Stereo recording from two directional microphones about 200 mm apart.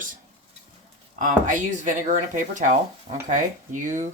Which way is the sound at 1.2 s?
40° right (ahead or behind).